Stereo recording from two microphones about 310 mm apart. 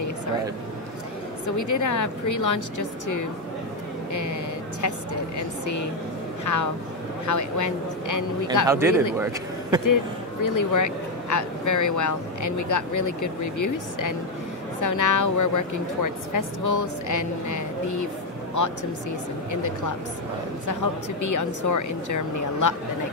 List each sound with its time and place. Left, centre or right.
1.6 s speech: left
6.4 s speech: left
8.6 s speech: centre
10.4 s speech: left